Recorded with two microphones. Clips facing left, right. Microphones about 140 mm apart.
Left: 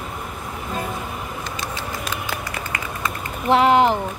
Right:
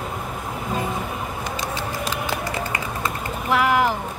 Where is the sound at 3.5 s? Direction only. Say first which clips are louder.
Left 4 dB; 25° left (ahead or behind).